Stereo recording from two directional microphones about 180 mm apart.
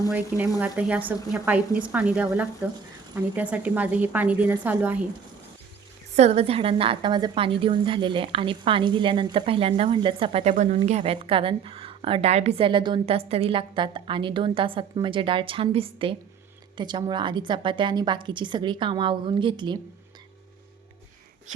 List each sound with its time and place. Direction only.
0.6 s a woman's voice: 10° right (ahead or behind)
6.1 s a woman's voice: 35° right (ahead or behind)
10.5 s a woman's voice: 40° right (ahead or behind); by 19.8 s 25° right (ahead or behind)